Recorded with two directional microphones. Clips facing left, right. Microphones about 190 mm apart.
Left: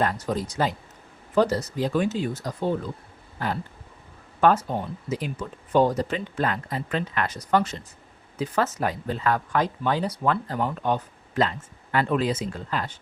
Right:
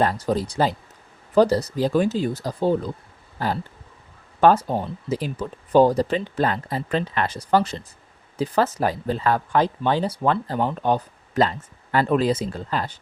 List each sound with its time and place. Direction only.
0.0 s speech: 35° right (ahead or behind)
3.3 s a sound: 30° right (ahead or behind)
4.4 s speech: 35° right (ahead or behind)